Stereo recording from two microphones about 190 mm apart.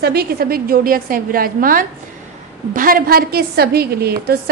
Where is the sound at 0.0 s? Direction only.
55° right (ahead or behind).